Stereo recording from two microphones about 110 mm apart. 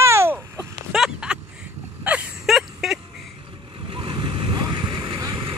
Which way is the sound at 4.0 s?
45° right (ahead or behind).